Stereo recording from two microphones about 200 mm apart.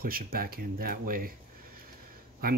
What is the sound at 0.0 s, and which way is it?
Speech, 45° right (ahead or behind).